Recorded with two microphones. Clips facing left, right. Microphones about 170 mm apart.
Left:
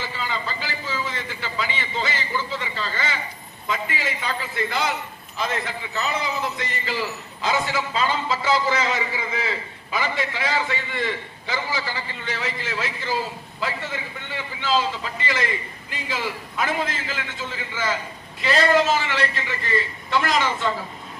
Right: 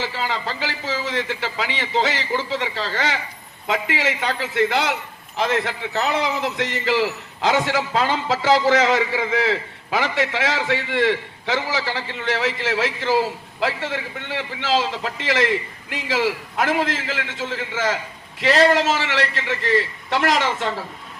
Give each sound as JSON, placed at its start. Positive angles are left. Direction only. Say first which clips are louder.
{"t": 0.0, "sound": "a man's voice", "louder": "right 4 dB", "side_deg": -75}